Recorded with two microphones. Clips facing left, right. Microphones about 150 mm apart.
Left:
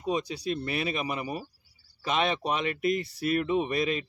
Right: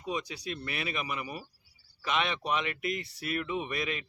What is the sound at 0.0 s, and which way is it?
Speech, 35° left (ahead or behind).